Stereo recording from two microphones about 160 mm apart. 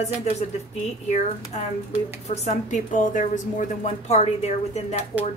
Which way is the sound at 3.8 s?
40° left (ahead or behind).